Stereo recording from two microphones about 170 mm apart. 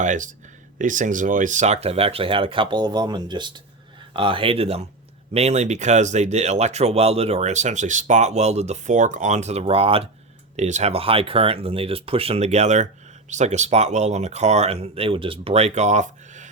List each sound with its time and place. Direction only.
0.0 s speech: 50° right (ahead or behind)